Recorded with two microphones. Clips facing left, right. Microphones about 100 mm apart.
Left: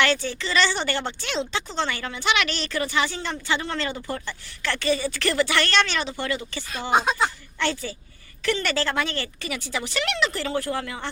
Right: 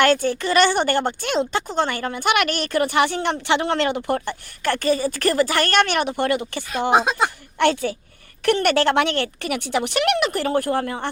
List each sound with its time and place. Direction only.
0.0 s speech: 50° right (ahead or behind)